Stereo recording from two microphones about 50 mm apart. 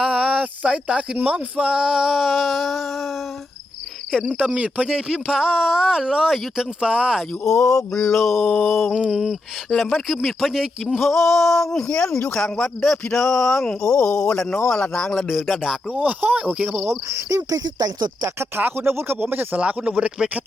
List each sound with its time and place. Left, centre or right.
0.0 s speech: centre
4.2 s speech: right
4.9 s speech: centre
6.7 s speech: centre
7.4 s speech: centre
7.9 s speech: centre
8.4 s a sound: left
8.9 s speech: centre; by 12.1 s left
12.3 s speech: centre
15.3 s speech: centre
15.9 s speech: right
17.1 s speech: right
18.3 s speech: right
19.5 s speech: right